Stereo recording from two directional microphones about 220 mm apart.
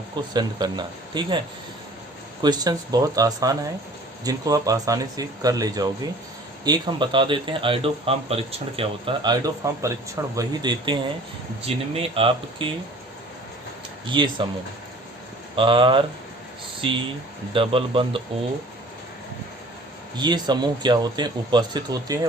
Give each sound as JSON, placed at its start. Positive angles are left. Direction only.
{"t": 0.3, "sound": "speech", "side_deg": -20}
{"t": 2.4, "sound": "speech", "side_deg": -20}
{"t": 14.1, "sound": "speech", "side_deg": -20}
{"t": 15.5, "sound": "speech", "side_deg": -20}
{"t": 17.5, "sound": "speech", "side_deg": -25}
{"t": 20.1, "sound": "speech", "side_deg": -20}